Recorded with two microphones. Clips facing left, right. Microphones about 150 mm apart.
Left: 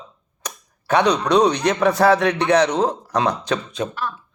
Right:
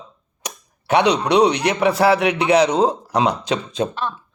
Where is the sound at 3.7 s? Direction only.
25° right (ahead or behind).